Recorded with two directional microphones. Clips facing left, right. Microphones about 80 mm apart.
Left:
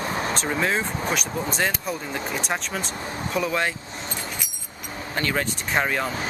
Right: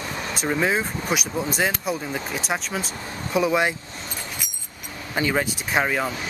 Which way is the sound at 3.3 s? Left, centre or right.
Centre.